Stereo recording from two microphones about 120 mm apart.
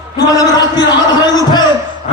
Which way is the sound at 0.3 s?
30° left (ahead or behind).